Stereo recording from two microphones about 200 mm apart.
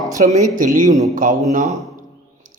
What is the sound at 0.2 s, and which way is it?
Speech, 40° right (ahead or behind).